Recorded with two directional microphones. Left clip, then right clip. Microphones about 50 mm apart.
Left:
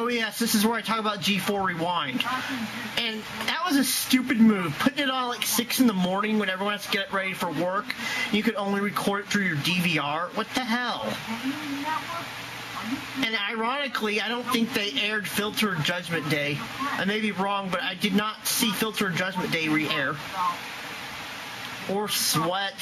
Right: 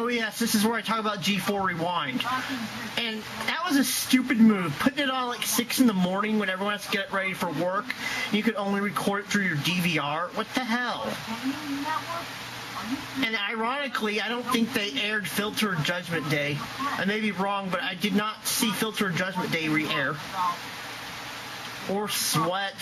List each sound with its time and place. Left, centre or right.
0.0 s speech: centre
5.9 s speech: centre
13.2 s speech: centre
22.0 s speech: centre